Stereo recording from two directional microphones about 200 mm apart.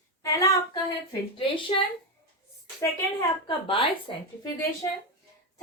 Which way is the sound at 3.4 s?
25° left (ahead or behind).